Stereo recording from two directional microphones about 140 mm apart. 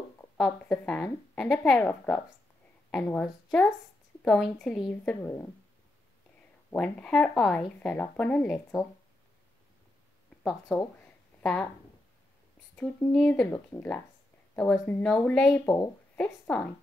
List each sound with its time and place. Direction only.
0.4 s speech: 5° left (ahead or behind)
6.7 s speech: 5° left (ahead or behind)
10.7 s speech: centre (ahead or behind)
12.7 s speech: 10° left (ahead or behind)
15.6 s a woman's voice: 20° left (ahead or behind)
16.2 s a woman's voice: 10° left (ahead or behind)